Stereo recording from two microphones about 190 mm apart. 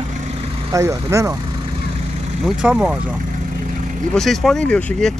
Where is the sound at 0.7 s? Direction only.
15° right (ahead or behind).